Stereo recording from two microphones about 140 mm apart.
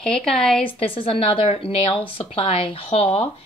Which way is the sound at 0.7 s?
40° left (ahead or behind).